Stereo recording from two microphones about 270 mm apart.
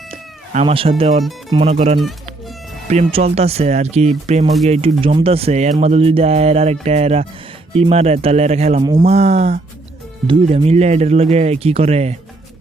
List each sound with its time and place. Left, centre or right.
0.5 s speech: centre